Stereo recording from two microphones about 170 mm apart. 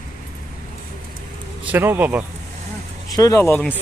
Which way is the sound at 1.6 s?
10° right (ahead or behind).